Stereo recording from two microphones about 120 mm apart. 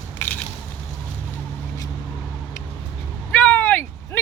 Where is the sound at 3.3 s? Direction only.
15° left (ahead or behind).